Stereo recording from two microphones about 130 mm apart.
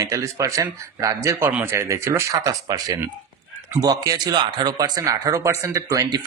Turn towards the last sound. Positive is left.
turn(degrees=-25)  # may be behind; listen again after turning